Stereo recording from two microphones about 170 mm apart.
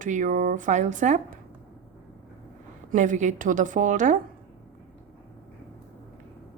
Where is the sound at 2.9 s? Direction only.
45° right (ahead or behind).